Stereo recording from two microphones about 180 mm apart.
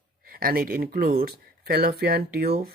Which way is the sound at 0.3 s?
55° right (ahead or behind).